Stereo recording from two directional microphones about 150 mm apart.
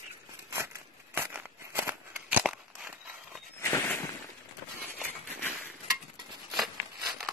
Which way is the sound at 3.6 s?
15° left (ahead or behind).